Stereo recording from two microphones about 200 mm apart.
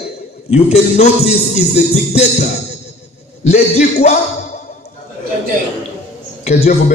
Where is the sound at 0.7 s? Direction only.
35° left (ahead or behind).